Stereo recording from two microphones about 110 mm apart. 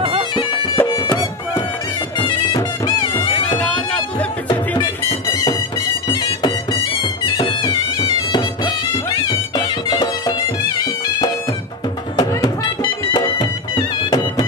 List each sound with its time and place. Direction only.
0.7 s music: 20° left (ahead or behind)
2.1 s music: 45° left (ahead or behind)
6.4 s music: 40° left (ahead or behind)
12.2 s music: 40° left (ahead or behind)